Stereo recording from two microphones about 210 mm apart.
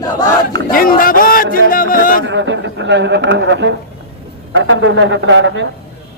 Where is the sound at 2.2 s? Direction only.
60° right (ahead or behind).